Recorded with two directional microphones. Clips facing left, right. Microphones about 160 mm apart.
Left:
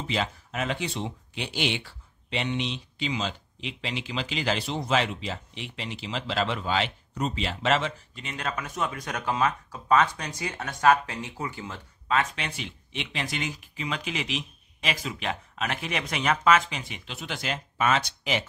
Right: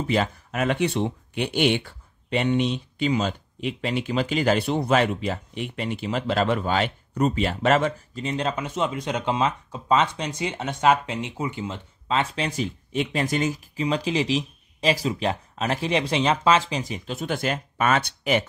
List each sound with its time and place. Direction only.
0.0 s speech: 50° right (ahead or behind)